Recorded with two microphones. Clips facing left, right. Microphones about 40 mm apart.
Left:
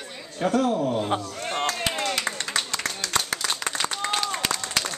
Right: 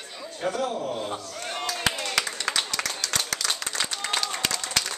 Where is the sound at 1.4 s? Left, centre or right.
Left.